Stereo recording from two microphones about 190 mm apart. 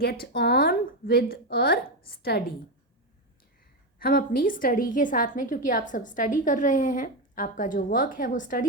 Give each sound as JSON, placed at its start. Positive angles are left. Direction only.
{"t": 0.0, "sound": "a woman's voice", "side_deg": 55}
{"t": 3.9, "sound": "a woman's voice", "side_deg": 50}